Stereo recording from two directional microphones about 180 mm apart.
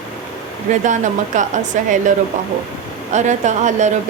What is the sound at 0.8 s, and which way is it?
Speech, 45° right (ahead or behind).